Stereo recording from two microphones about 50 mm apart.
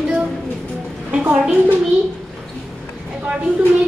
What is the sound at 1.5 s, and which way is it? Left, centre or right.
Speech, right.